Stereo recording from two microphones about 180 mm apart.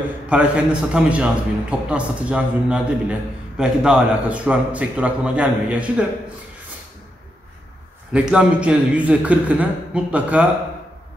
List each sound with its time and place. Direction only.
0.3 s a man's voice: 5° right (ahead or behind)
8.1 s a man's voice: 5° right (ahead or behind)